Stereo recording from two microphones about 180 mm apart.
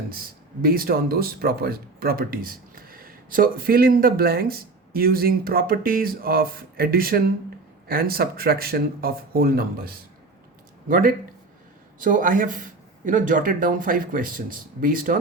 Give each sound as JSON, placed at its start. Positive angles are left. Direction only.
{"t": 0.1, "sound": "a man's voice", "side_deg": -55}